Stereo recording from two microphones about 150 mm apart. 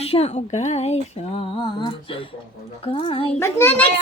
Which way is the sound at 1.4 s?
35° left (ahead or behind).